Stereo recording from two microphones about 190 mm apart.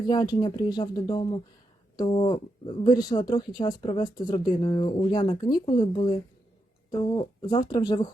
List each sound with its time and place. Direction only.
0.1 s speech: 20° left (ahead or behind)
7.2 s speech: 25° left (ahead or behind)